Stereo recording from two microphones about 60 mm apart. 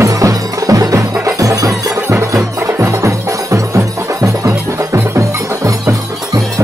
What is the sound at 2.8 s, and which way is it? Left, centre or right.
Music, right.